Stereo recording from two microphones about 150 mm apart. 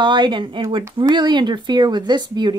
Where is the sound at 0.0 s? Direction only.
30° right (ahead or behind).